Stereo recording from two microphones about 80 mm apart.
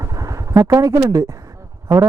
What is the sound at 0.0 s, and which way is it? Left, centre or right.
Vehicle, right.